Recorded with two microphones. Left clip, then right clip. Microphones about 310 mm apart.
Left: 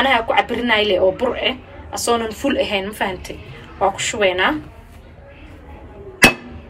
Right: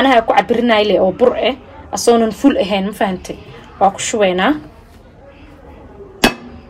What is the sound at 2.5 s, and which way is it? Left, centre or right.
A woman's voice, right.